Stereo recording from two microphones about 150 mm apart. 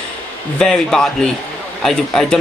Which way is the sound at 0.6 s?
5° left (ahead or behind).